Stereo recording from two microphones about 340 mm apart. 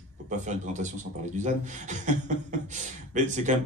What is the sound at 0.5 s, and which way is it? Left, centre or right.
A man's voice, right.